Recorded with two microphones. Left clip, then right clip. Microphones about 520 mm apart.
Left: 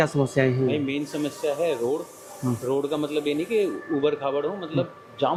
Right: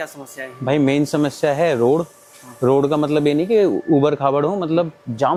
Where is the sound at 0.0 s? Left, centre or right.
Left.